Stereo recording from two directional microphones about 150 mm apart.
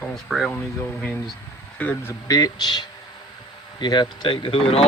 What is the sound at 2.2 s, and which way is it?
Speech, 25° left (ahead or behind).